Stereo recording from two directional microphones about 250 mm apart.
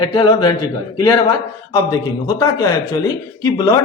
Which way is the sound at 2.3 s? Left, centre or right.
Centre.